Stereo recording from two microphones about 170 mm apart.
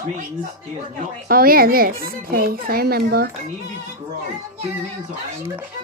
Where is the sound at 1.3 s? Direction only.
60° right (ahead or behind).